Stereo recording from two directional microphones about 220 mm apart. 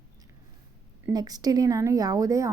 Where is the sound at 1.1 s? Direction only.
15° right (ahead or behind).